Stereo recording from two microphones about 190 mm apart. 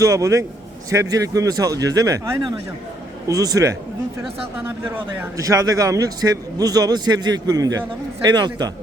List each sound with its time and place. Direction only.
0.0 s speech: 15° right (ahead or behind)
5.1 s a man's voice: 15° right (ahead or behind)